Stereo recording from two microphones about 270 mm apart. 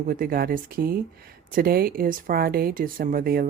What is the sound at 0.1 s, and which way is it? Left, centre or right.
Speech, right.